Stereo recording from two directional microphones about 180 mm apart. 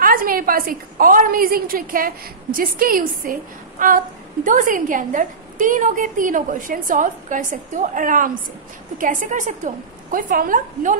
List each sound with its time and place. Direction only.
0.0 s a woman's voice: 55° right (ahead or behind)